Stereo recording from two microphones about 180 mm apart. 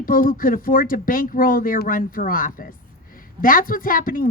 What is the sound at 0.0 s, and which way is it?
A woman's voice, 50° left (ahead or behind).